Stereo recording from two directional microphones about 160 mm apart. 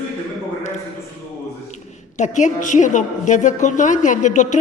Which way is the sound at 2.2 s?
50° left (ahead or behind).